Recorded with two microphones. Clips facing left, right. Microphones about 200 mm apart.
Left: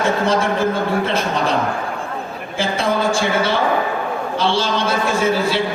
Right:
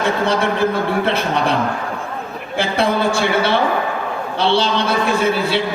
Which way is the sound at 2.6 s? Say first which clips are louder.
Right 2 dB; 60° right (ahead or behind).